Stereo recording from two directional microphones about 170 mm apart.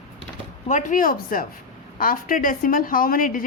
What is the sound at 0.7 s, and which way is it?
A woman's voice, 50° left (ahead or behind).